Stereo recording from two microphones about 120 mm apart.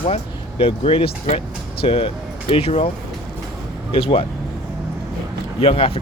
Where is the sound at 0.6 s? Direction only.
55° left (ahead or behind).